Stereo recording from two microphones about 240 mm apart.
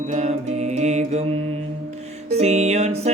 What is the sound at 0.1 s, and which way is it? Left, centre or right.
Music, right.